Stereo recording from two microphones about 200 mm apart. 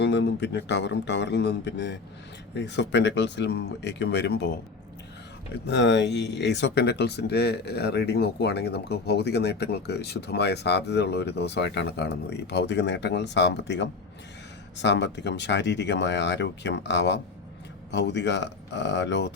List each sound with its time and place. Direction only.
0.0 s speech: 60° left (ahead or behind)
5.6 s speech: 60° left (ahead or behind)